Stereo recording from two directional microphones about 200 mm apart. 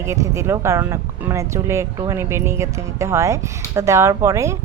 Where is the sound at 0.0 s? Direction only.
15° right (ahead or behind).